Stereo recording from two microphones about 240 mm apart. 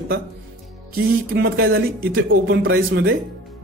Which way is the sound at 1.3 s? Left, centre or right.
Right.